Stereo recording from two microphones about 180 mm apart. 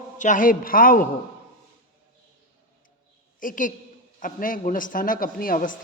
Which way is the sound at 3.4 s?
45° left (ahead or behind).